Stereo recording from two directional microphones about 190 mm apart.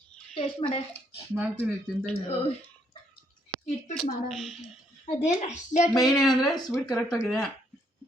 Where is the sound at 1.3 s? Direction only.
10° right (ahead or behind).